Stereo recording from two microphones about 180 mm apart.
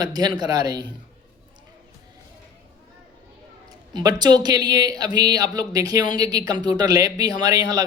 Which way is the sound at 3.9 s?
25° right (ahead or behind).